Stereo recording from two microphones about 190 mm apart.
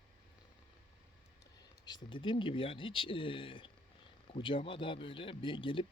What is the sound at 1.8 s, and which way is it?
Speech, 25° left (ahead or behind).